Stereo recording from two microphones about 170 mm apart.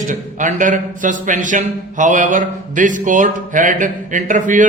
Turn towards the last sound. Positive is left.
turn(degrees=-50)  # may be behind; listen again after turning